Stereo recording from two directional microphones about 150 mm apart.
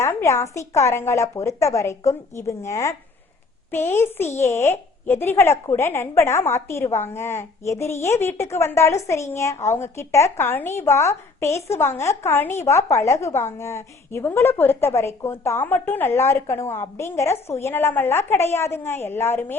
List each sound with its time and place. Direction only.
0.1 s a woman's voice: 15° left (ahead or behind)